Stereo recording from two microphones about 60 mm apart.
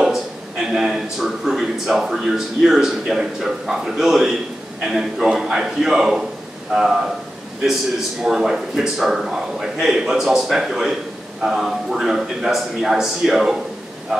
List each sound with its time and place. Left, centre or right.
0.7 s a man's voice: centre
8.2 s a man's voice: centre